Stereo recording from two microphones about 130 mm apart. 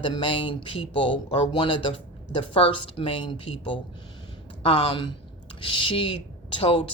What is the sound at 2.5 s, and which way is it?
Speech, 45° left (ahead or behind).